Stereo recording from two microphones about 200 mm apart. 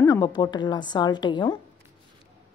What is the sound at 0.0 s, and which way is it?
A woman's voice, 20° left (ahead or behind).